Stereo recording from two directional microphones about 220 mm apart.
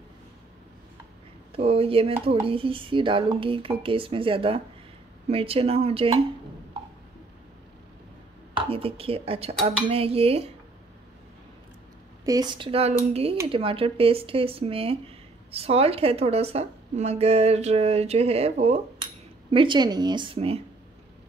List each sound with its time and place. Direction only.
1.5 s speech: 25° right (ahead or behind)
8.5 s speech: 25° right (ahead or behind)
12.3 s speech: 20° right (ahead or behind)